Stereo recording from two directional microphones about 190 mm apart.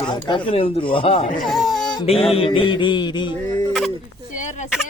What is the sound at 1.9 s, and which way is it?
Music, 30° left (ahead or behind).